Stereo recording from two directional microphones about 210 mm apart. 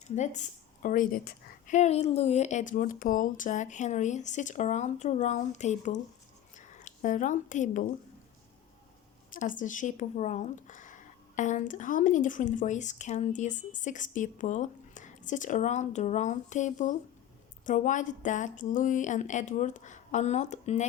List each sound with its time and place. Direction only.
0.2 s a woman's voice: 35° left (ahead or behind)
9.3 s a woman's voice: 40° left (ahead or behind)